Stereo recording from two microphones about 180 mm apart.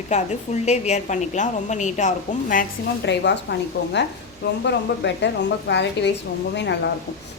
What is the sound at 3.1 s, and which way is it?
Speech, 75° left (ahead or behind).